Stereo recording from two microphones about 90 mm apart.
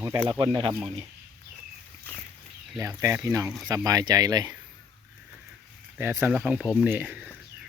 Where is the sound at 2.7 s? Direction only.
35° right (ahead or behind).